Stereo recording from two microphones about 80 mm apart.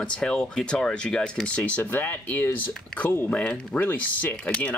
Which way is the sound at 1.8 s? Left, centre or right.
Left.